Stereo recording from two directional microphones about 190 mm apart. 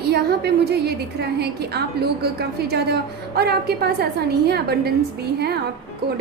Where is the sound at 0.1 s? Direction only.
55° right (ahead or behind).